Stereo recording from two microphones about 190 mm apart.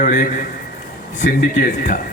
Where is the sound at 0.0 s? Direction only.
45° left (ahead or behind).